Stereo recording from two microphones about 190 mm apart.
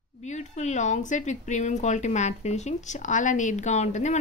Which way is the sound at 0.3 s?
40° left (ahead or behind).